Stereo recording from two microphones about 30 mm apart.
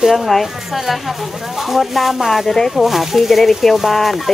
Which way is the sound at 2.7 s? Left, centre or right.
Centre.